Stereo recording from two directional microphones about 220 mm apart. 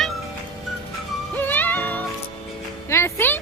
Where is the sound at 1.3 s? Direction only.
10° left (ahead or behind).